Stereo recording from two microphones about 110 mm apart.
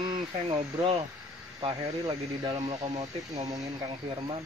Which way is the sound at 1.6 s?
50° right (ahead or behind).